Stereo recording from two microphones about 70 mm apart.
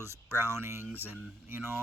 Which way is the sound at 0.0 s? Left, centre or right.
Right.